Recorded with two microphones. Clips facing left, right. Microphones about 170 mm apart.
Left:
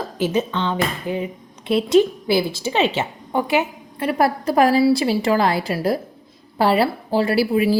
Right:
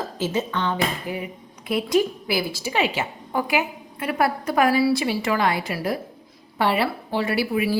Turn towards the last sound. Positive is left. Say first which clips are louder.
# left 5 dB
turn(degrees=30)  # may be behind; listen again after turning